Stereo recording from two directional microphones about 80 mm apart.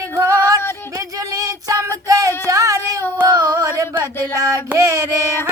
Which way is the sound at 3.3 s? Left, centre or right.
Right.